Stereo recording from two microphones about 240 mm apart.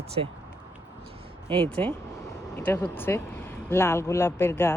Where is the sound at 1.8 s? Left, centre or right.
Centre.